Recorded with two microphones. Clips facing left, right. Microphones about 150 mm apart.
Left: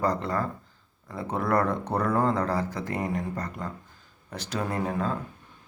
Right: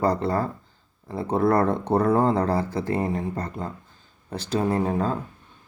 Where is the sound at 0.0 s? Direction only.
30° right (ahead or behind).